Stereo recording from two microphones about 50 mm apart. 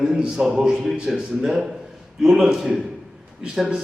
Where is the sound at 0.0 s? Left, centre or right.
Centre.